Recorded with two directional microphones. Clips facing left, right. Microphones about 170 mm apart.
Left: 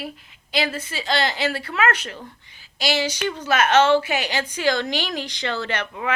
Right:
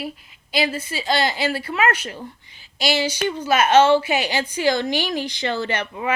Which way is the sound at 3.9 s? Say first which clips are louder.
Right 2 dB; 30° right (ahead or behind).